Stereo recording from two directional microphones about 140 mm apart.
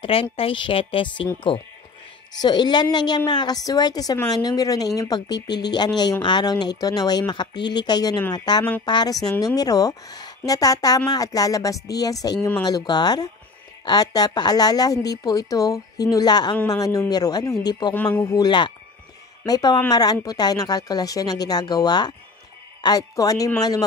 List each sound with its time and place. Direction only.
0.0 s a woman's voice: 40° left (ahead or behind)
17.9 s speech: 10° left (ahead or behind)
18.3 s a woman's voice: 30° left (ahead or behind)